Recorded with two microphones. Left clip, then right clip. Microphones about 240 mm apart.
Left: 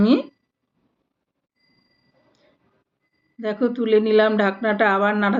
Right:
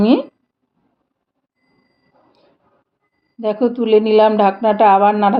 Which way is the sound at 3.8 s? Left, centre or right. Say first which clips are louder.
Right 5 dB; right.